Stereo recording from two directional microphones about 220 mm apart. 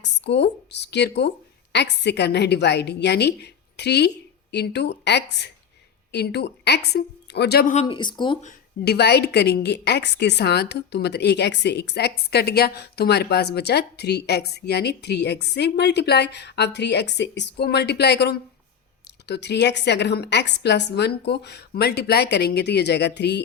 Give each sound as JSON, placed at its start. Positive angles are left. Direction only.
{"t": 0.0, "sound": "a woman's voice", "side_deg": 50}
{"t": 7.7, "sound": "speech", "side_deg": 25}
{"t": 8.8, "sound": "speech", "side_deg": 45}